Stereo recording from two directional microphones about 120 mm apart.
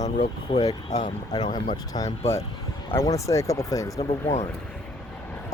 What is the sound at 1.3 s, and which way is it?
Speech, 35° left (ahead or behind).